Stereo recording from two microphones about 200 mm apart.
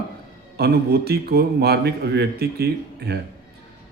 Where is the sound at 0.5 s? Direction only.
50° right (ahead or behind).